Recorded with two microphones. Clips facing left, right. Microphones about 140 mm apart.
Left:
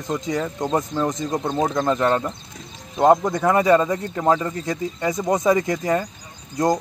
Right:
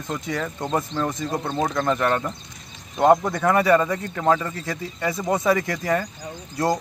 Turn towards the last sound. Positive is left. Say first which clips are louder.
# left 2 dB
turn(degrees=20)  # may be behind; listen again after turning